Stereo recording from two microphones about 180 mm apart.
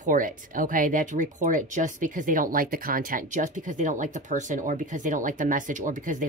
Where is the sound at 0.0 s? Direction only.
50° right (ahead or behind).